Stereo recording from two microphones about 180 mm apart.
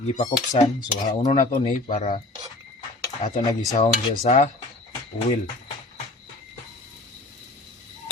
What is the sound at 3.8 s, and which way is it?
Dishes, 40° left (ahead or behind).